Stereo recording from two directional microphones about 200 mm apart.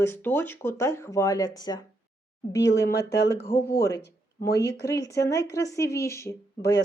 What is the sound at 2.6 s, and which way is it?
Speech, 55° left (ahead or behind).